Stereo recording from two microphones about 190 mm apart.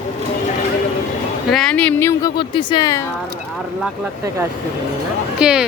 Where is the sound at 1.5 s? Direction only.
5° left (ahead or behind).